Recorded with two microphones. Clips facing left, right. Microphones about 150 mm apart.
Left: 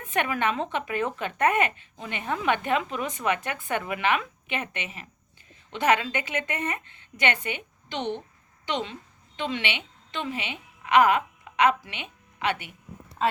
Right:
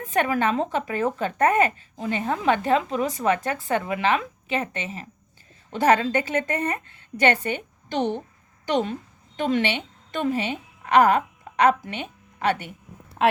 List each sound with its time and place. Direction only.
0.0 s a woman's voice: 40° right (ahead or behind)